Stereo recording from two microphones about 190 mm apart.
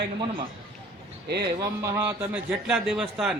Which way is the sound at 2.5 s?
5° right (ahead or behind).